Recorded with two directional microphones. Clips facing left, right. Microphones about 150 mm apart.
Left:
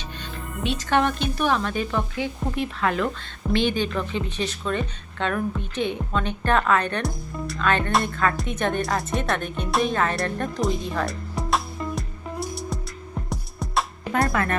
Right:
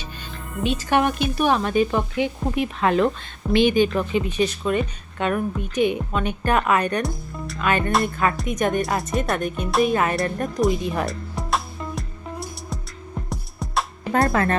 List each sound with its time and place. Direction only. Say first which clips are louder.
0.6 s speech: right 4 dB; centre (ahead or behind)
0.9 s a woman's voice: right 1 dB; 10° right (ahead or behind)
7.0 s a woman's voice: right 1 dB; centre (ahead or behind)
11.0 s music: even; centre (ahead or behind)
14.1 s speech: right 4 dB; 35° right (ahead or behind)